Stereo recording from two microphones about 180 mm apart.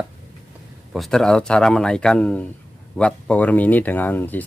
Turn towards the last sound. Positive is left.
turn(degrees=10)  # may be behind; listen again after turning